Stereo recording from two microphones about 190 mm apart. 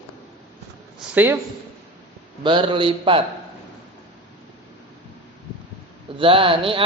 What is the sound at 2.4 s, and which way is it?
Speech, 25° right (ahead or behind).